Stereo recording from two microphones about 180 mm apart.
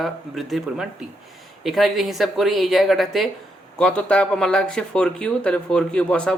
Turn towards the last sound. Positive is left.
turn(degrees=5)  # may be behind; listen again after turning